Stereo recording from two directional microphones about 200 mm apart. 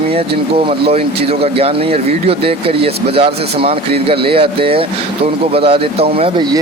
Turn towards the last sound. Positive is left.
turn(degrees=-30)  # may be behind; listen again after turning